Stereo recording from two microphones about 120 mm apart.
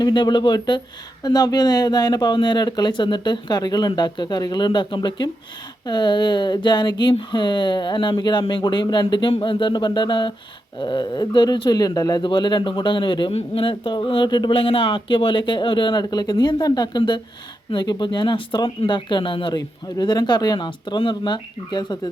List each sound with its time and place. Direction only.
0.0 s speech: 40° left (ahead or behind)
13.3 s speech: 55° left (ahead or behind); by 22.1 s 35° left (ahead or behind)